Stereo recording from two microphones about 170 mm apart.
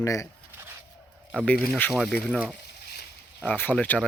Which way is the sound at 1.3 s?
10° left (ahead or behind).